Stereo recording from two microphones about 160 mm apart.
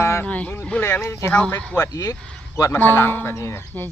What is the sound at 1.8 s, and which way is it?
Speech, 20° left (ahead or behind).